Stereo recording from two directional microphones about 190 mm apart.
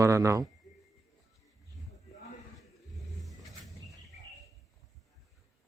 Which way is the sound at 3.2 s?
Centre (ahead or behind).